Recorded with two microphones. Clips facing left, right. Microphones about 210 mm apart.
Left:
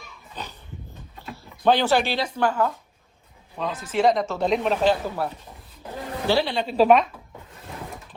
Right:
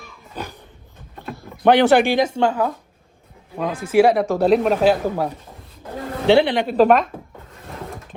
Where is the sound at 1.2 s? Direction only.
70° right (ahead or behind).